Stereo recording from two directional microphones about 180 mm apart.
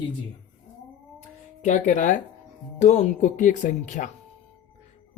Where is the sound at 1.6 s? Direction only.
45° left (ahead or behind).